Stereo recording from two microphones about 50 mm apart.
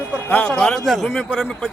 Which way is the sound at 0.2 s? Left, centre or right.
Left.